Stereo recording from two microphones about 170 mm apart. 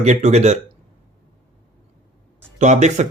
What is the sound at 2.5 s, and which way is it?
Speech, 45° right (ahead or behind).